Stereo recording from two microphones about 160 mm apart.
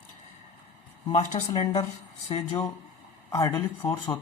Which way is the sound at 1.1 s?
40° left (ahead or behind).